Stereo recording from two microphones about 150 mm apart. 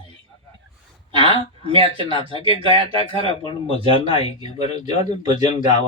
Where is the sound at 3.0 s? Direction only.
35° left (ahead or behind).